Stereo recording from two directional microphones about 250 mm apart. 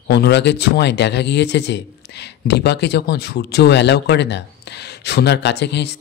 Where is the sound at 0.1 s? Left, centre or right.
Left.